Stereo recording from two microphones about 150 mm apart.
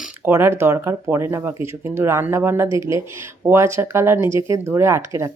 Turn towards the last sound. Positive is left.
turn(degrees=-20)  # may be behind; listen again after turning